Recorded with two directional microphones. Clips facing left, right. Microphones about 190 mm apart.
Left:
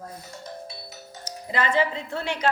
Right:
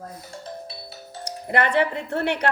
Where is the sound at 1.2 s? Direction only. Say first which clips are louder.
Right 4 dB; 65° right (ahead or behind).